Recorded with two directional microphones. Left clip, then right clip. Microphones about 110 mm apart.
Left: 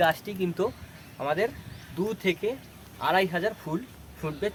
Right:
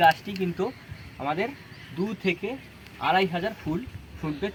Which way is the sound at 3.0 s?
35° left (ahead or behind).